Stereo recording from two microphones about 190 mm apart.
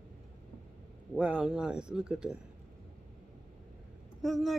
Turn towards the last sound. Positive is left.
turn(degrees=0)  # may be behind; listen again after turning